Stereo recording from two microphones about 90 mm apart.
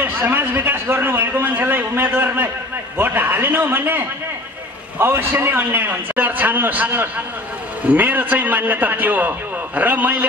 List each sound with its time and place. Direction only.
0.0 s a man's voice: 20° right (ahead or behind)